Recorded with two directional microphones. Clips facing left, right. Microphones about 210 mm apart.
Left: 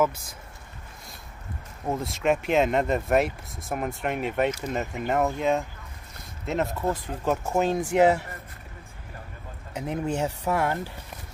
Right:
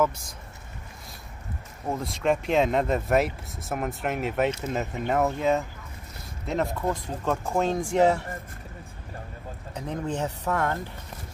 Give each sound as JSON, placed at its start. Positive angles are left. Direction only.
{"t": 1.9, "sound": "speech", "side_deg": 0}
{"t": 9.8, "sound": "speech", "side_deg": 10}